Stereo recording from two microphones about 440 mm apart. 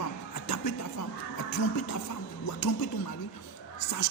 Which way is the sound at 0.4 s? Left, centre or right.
Left.